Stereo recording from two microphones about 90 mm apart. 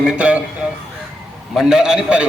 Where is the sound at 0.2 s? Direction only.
15° right (ahead or behind).